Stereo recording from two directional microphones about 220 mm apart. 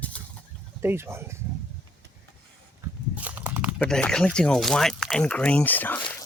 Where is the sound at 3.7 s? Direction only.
5° left (ahead or behind).